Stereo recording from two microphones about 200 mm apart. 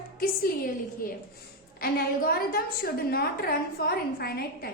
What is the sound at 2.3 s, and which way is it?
A woman's voice, 50° left (ahead or behind).